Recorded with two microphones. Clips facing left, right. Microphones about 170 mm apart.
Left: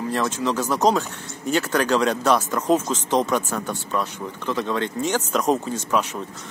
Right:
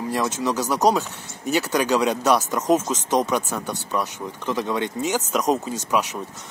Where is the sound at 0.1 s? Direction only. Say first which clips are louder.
Even; 10° right (ahead or behind).